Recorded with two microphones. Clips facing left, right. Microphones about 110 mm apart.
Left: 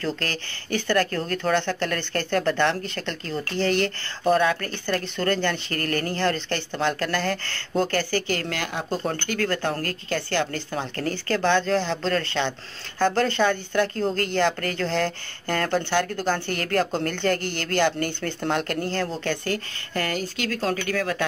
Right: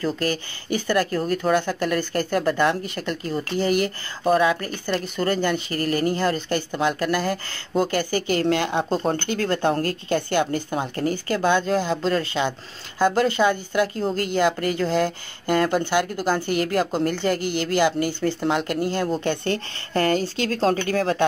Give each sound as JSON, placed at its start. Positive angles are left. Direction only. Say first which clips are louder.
{"t": 0.0, "sound": "speech", "louder": "right 4 dB", "side_deg": -10}
{"t": 19.4, "sound": "speech", "louder": "right 3 dB", "side_deg": -30}